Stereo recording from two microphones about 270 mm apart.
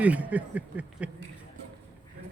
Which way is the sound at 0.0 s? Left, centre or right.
Centre.